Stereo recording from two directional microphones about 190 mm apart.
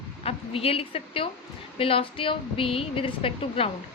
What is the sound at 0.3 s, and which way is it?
A woman's voice, 30° left (ahead or behind).